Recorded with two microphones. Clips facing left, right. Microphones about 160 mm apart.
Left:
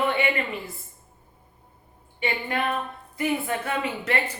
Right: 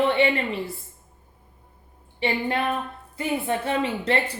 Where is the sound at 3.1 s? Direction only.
30° right (ahead or behind).